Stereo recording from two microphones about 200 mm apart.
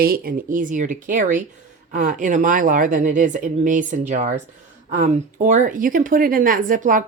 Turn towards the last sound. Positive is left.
turn(degrees=-40)  # may be behind; listen again after turning